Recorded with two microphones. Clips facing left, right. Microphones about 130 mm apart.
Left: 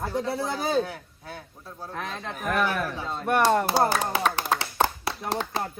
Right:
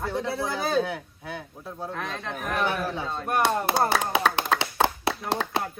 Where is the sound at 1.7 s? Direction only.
25° right (ahead or behind).